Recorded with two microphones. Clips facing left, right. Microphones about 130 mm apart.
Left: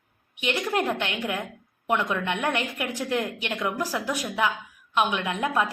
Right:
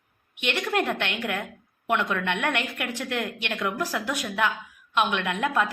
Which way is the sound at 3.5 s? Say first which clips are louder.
Even; 15° left (ahead or behind).